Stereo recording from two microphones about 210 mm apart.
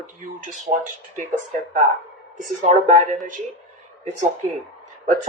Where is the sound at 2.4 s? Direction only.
35° right (ahead or behind).